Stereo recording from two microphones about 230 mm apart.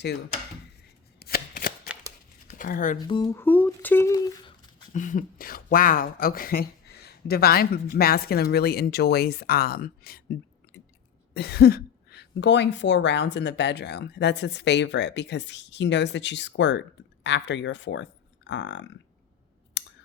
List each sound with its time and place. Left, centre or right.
1.2 s shuffling cards: left
2.5 s speech: left
3.0 s speech: centre
4.9 s speech: left
11.3 s speech: left
19.8 s a sound: left